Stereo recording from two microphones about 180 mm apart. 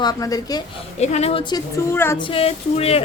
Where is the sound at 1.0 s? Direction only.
40° left (ahead or behind).